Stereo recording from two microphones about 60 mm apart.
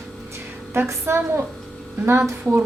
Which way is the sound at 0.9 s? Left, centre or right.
Right.